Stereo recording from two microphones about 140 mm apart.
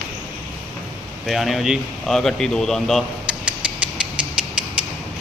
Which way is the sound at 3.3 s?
5° right (ahead or behind).